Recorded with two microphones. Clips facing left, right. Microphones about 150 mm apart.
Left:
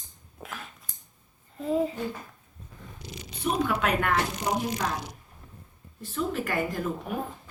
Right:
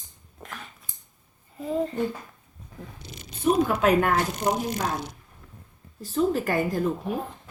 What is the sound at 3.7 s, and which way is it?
A woman's voice, 40° right (ahead or behind).